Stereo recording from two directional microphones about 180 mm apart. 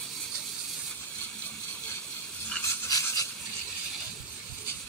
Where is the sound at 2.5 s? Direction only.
15° left (ahead or behind).